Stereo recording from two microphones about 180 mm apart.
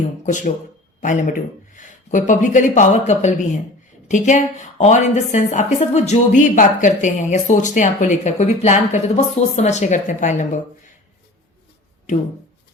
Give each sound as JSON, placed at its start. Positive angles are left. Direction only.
{"t": 0.3, "sound": "a woman's voice", "side_deg": 45}